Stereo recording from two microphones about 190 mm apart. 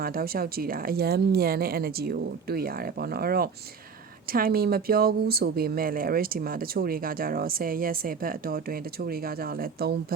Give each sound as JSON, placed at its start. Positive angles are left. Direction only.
{"t": 0.0, "sound": "speech", "side_deg": -50}